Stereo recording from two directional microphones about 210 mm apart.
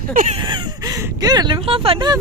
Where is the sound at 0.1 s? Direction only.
40° right (ahead or behind).